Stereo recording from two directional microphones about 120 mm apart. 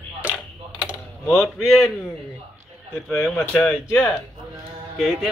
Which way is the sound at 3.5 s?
5° left (ahead or behind).